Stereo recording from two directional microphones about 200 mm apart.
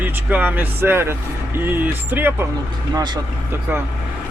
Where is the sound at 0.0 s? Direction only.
10° right (ahead or behind).